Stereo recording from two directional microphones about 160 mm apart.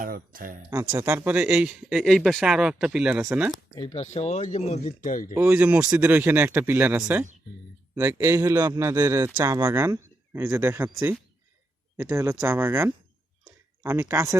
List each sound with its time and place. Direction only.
0.0 s speech: 60° right (ahead or behind)
0.7 s speech: 20° right (ahead or behind)
3.8 s speech: 30° left (ahead or behind)
4.0 s speech: 40° left (ahead or behind)
5.3 s a man's voice: 15° right (ahead or behind)
13.4 s a sound: 15° right (ahead or behind)